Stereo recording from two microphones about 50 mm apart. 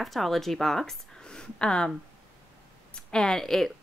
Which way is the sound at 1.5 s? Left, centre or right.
Centre.